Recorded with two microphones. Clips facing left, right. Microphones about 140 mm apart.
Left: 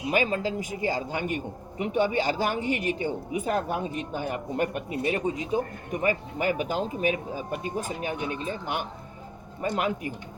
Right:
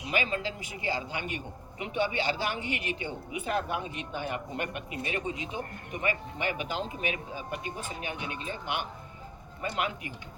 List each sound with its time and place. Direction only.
0.1 s speech: 40° left (ahead or behind)